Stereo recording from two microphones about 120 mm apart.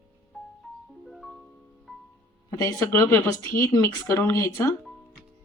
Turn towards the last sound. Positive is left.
turn(degrees=25)  # may be behind; listen again after turning